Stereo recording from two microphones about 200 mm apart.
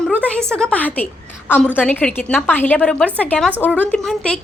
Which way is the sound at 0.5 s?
5° left (ahead or behind).